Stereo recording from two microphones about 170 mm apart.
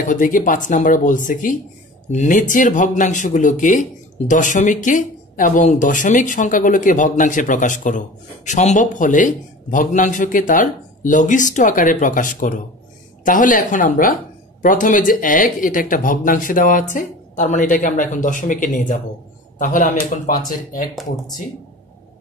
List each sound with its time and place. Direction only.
0.0 s speech: 50° left (ahead or behind)